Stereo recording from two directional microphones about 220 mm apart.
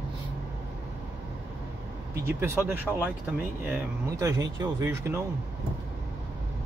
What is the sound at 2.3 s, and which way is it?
Speech, 10° right (ahead or behind).